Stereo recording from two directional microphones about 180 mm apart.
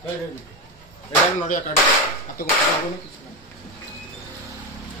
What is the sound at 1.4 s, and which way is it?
Speech, 45° left (ahead or behind).